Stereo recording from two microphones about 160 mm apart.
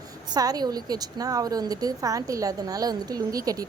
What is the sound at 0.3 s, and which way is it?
A woman's voice, 25° right (ahead or behind).